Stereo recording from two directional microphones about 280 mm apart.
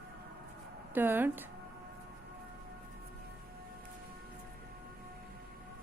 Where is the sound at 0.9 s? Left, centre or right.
Centre.